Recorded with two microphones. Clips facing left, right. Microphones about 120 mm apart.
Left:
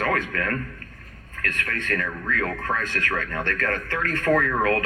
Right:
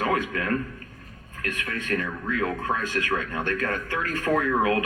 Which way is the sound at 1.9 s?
15° right (ahead or behind).